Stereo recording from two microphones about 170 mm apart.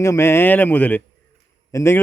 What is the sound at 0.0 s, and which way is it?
A man's voice, 15° left (ahead or behind).